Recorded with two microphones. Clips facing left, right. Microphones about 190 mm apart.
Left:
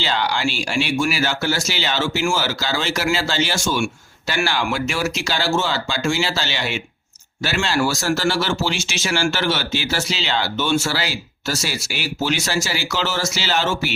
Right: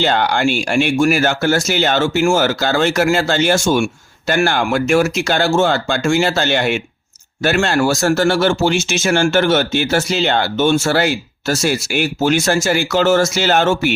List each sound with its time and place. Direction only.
0.0 s speech: 55° right (ahead or behind)